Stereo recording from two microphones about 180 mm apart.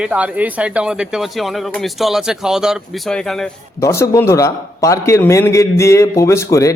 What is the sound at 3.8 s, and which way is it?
A man's voice, 15° left (ahead or behind).